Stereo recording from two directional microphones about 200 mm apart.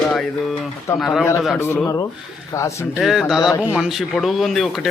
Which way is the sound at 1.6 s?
10° left (ahead or behind).